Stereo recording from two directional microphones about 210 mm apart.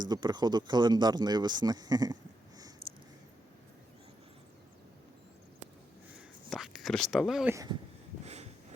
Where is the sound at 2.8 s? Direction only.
45° right (ahead or behind).